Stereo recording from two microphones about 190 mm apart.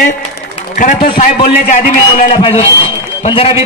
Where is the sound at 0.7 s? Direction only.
45° left (ahead or behind).